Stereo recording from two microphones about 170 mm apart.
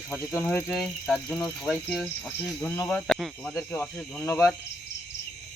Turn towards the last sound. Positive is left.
turn(degrees=15)  # may be behind; listen again after turning